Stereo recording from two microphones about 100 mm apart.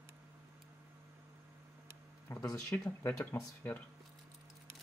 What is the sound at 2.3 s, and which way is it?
Speech, 35° left (ahead or behind).